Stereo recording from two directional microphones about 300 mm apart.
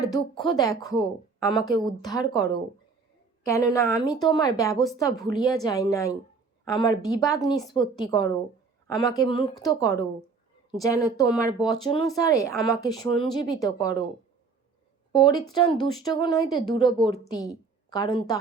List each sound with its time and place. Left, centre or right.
0.0 s speech: centre
3.4 s a woman's voice: centre
15.2 s speech: centre